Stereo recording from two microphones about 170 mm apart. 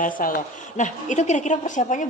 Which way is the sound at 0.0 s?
50° left (ahead or behind).